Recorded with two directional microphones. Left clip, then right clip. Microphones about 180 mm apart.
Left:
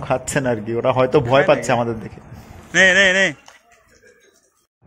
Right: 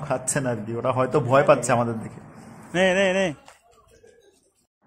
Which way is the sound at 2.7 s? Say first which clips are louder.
Left 7 dB; centre (ahead or behind).